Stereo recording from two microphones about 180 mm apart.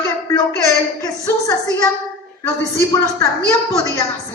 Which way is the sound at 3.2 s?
15° left (ahead or behind).